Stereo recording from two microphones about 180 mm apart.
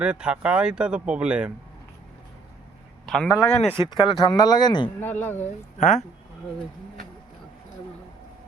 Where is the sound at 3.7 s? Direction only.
25° left (ahead or behind).